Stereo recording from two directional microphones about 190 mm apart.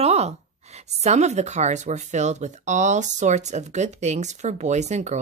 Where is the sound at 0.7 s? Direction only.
35° right (ahead or behind).